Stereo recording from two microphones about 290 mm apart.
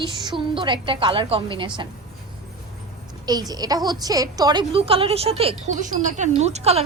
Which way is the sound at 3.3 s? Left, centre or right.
Centre.